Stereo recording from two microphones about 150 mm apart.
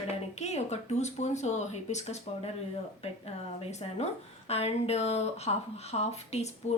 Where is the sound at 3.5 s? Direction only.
40° left (ahead or behind).